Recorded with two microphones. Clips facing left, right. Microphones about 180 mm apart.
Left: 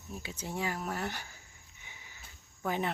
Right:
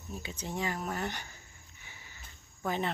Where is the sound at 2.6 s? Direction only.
10° left (ahead or behind).